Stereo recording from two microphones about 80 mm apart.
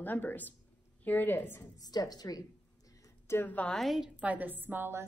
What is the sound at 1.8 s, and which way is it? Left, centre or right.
Speech, left.